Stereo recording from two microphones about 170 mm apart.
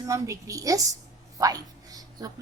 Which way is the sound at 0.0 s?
20° right (ahead or behind).